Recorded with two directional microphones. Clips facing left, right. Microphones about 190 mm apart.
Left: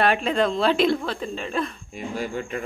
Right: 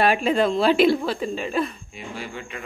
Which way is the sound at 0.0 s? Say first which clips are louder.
Right 2 dB; 5° right (ahead or behind).